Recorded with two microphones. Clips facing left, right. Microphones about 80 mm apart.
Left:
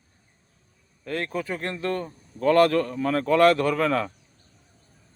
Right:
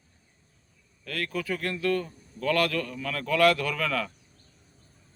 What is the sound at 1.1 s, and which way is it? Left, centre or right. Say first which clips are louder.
A man's voice: left 3 dB; left.